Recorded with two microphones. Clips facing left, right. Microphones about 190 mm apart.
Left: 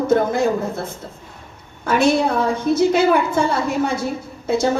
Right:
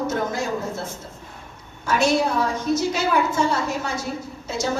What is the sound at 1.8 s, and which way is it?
A woman's voice, 55° left (ahead or behind).